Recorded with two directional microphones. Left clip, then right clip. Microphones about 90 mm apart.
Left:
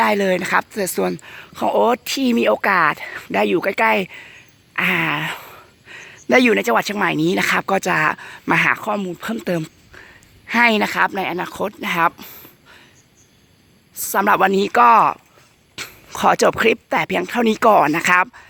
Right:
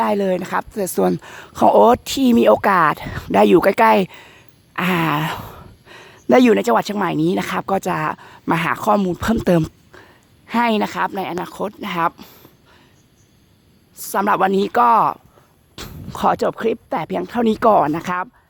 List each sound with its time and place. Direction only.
0.0 s speech: 15° right (ahead or behind)
0.3 s speech: 5° right (ahead or behind)
0.7 s speech: 20° right (ahead or behind)
1.1 s speech: 65° right (ahead or behind)
1.9 s speech: 45° right (ahead or behind)
5.5 s a sound: 40° right (ahead or behind)
6.2 s speech: 35° right (ahead or behind); by 8.7 s 20° right (ahead or behind)
8.8 s speech: 70° right (ahead or behind)
9.9 s a sound: 25° right (ahead or behind)
10.7 s speech: 5° right (ahead or behind)
13.9 s speech: 5° right (ahead or behind)
16.4 s speech: 5° left (ahead or behind)
16.9 s speech: 5° right (ahead or behind)